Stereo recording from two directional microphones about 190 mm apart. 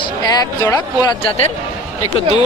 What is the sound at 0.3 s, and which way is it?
Speech, 20° left (ahead or behind).